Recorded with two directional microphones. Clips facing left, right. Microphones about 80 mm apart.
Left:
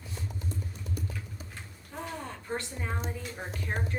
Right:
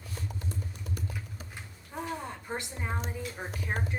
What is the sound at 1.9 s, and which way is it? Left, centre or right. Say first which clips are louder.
A woman's voice: right 2 dB; centre.